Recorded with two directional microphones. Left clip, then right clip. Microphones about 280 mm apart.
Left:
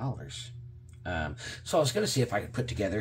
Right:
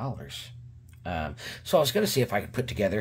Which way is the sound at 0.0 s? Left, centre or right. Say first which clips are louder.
Right 3 dB; right.